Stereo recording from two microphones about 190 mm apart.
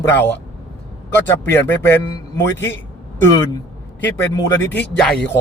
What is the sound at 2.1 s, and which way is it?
A man's voice, 15° left (ahead or behind).